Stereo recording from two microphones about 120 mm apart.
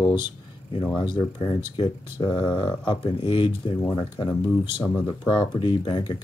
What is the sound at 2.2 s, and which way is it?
Speech, 40° left (ahead or behind).